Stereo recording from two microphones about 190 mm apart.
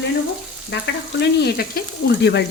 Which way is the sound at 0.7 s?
70° left (ahead or behind).